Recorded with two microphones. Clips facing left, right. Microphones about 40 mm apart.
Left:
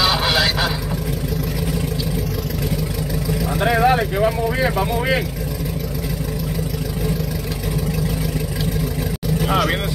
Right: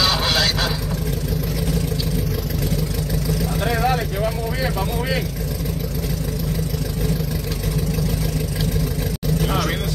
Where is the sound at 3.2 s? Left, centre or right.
Centre.